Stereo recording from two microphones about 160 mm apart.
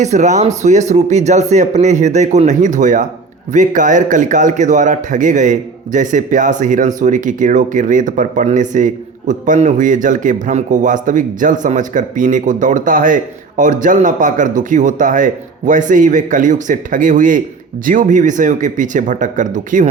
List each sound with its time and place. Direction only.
0.0 s a man's voice: 50° right (ahead or behind)